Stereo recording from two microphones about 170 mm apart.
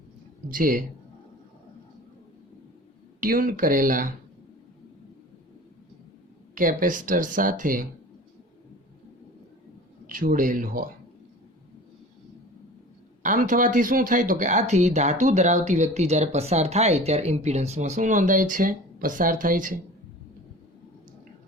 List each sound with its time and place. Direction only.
0.5 s speech: 55° right (ahead or behind)
3.2 s speech: 55° right (ahead or behind)
6.5 s speech: 55° right (ahead or behind)
10.1 s speech: 55° right (ahead or behind)
13.2 s speech: 50° right (ahead or behind)